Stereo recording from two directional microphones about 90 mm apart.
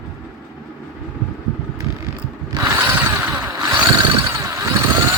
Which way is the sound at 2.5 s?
30° right (ahead or behind).